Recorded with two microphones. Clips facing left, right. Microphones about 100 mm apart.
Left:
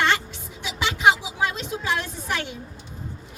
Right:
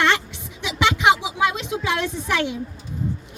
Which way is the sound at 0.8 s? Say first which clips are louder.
Right 1 dB; 70° right (ahead or behind).